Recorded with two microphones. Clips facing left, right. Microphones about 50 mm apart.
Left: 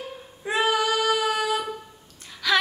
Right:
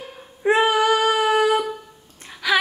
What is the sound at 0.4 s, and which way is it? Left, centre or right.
Child singing, right.